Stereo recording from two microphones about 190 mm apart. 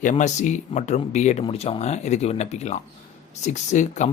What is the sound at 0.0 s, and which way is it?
Speech, 40° left (ahead or behind).